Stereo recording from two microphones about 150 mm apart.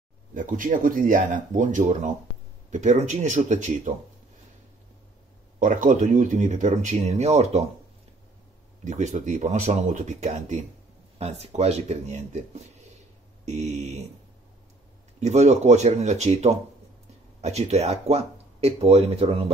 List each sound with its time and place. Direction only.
0.3 s speech: 60° right (ahead or behind)
5.6 s speech: 60° right (ahead or behind)
8.8 s speech: 55° right (ahead or behind)
15.1 s speech: 50° right (ahead or behind)